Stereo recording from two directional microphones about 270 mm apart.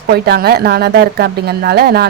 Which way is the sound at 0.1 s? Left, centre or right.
Right.